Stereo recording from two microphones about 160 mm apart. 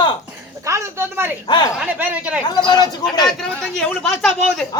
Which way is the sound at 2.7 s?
25° left (ahead or behind).